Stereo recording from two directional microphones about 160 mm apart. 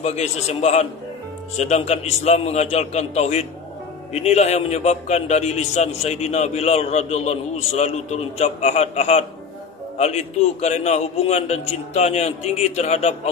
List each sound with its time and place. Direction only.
0.0 s a man's voice: 45° left (ahead or behind)